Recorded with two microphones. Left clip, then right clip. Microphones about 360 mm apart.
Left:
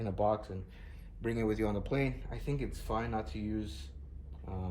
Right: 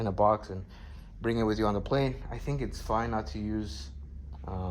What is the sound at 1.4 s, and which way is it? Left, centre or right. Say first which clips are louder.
Speech: right 4 dB; centre.